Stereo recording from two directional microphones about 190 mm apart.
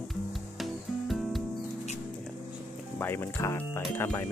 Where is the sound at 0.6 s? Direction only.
Centre (ahead or behind).